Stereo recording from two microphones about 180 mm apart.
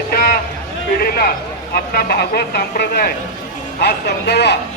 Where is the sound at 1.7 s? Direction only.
55° left (ahead or behind).